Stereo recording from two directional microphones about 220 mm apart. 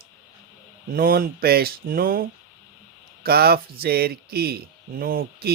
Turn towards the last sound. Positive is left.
turn(degrees=-40)  # may be behind; listen again after turning